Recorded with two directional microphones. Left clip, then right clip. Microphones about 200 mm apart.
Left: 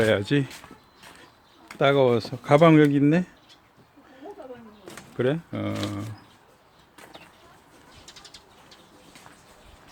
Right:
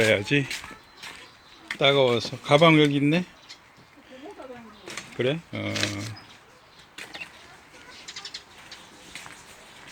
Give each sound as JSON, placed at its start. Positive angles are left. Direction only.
{"t": 0.0, "sound": "speech", "side_deg": 30}
{"t": 1.8, "sound": "speech", "side_deg": 35}
{"t": 4.9, "sound": "speech", "side_deg": 30}
{"t": 5.7, "sound": "speech", "side_deg": 20}